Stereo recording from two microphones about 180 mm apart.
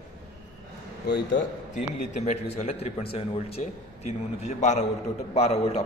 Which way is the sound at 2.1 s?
40° left (ahead or behind).